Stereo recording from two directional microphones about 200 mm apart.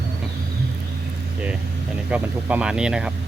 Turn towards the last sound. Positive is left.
turn(degrees=-5)  # may be behind; listen again after turning